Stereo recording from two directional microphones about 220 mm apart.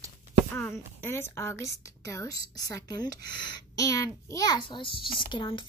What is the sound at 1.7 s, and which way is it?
Speech, 50° right (ahead or behind).